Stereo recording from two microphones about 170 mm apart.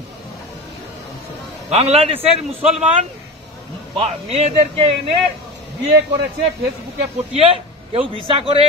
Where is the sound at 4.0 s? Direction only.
35° right (ahead or behind).